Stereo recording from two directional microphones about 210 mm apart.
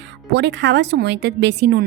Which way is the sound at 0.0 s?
55° right (ahead or behind).